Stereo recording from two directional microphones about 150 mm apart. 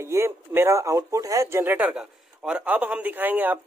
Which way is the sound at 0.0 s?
20° right (ahead or behind).